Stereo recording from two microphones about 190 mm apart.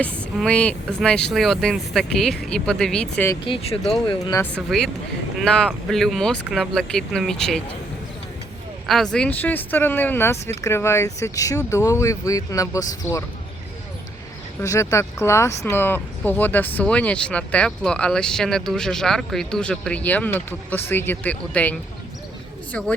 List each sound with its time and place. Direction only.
0.4 s speech: 5° left (ahead or behind)
3.4 s speech: 30° left (ahead or behind)
4.4 s speech: 5° left (ahead or behind)
9.1 s speech: 5° left (ahead or behind)
14.6 s speech: 15° left (ahead or behind)